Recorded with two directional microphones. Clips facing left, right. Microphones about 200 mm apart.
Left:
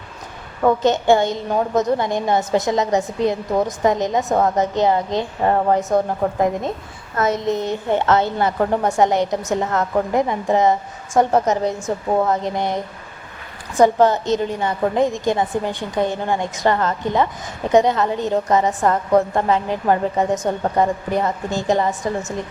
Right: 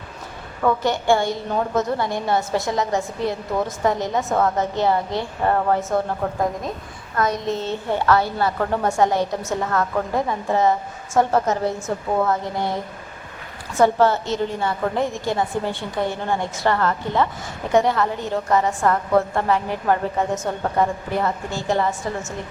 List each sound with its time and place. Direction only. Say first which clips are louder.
0.6 s a woman's voice: left 4 dB; 20° left (ahead or behind)